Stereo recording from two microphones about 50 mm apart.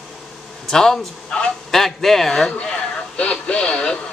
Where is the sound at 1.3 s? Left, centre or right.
Centre.